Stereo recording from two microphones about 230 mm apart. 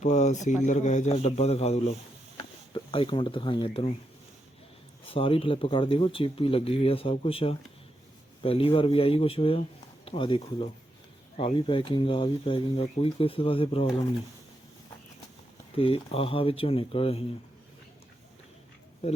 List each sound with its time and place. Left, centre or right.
0.0 s a man's voice: left
5.0 s speech: left
15.7 s speech: left